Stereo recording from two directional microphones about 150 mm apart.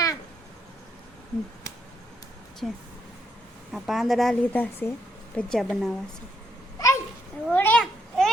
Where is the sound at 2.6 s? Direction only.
Centre (ahead or behind).